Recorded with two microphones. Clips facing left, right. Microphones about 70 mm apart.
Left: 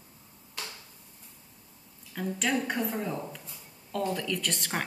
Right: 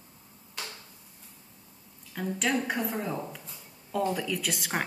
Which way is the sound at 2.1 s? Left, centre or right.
Centre.